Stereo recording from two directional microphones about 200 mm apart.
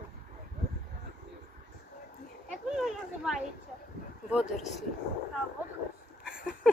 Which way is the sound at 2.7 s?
Centre (ahead or behind).